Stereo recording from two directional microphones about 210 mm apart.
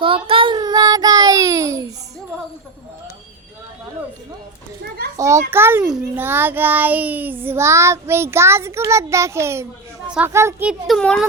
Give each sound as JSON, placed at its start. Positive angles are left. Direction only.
{"t": 0.0, "sound": "child singing", "side_deg": -25}
{"t": 5.1, "sound": "a sound", "side_deg": -15}
{"t": 5.5, "sound": "a child's voice", "side_deg": -10}